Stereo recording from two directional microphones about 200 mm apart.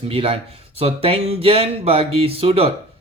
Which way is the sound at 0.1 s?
25° right (ahead or behind).